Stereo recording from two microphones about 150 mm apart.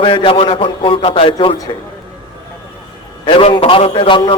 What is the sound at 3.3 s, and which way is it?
A man's voice, 35° left (ahead or behind).